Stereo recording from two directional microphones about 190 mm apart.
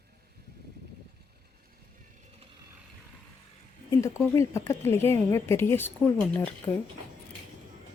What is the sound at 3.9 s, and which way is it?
A woman's voice, 15° left (ahead or behind).